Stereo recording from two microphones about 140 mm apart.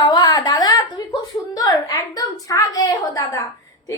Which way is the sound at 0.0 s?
30° left (ahead or behind).